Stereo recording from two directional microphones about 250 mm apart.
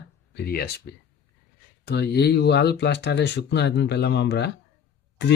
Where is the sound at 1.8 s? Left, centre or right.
Left.